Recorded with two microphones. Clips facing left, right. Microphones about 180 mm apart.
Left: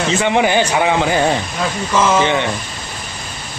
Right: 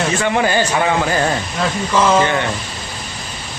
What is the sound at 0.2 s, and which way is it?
Speech, 20° left (ahead or behind).